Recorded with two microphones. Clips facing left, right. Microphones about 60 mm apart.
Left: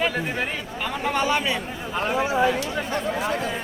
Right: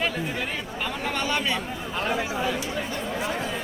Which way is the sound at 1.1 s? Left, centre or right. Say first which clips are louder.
Left 4 dB; centre.